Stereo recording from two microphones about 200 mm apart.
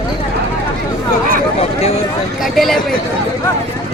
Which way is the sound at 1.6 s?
30° left (ahead or behind).